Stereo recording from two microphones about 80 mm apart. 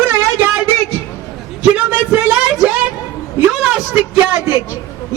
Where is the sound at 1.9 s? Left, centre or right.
Right.